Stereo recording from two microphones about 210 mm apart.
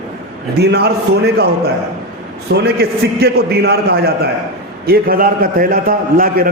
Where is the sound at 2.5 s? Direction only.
50° right (ahead or behind).